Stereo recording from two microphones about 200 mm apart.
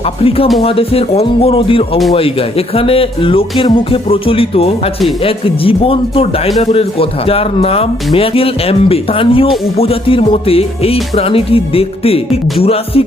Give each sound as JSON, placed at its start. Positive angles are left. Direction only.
{"t": 0.0, "sound": "speech", "side_deg": 30}